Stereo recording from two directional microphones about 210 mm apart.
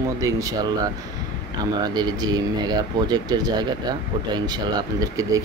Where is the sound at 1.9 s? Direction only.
20° right (ahead or behind).